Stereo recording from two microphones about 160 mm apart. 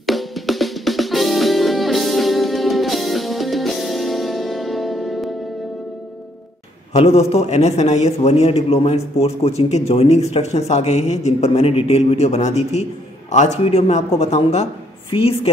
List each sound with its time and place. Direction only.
0.0 s music: centre (ahead or behind)
6.9 s a man's voice: 40° left (ahead or behind)